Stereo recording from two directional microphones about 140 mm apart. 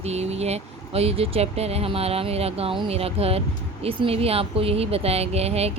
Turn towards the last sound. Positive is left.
turn(degrees=-45)  # may be behind; listen again after turning